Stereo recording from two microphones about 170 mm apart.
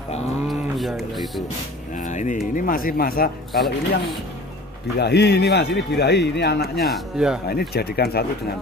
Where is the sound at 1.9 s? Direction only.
45° left (ahead or behind).